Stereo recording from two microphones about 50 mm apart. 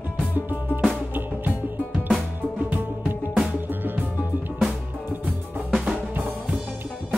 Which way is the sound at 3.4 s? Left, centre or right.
Right.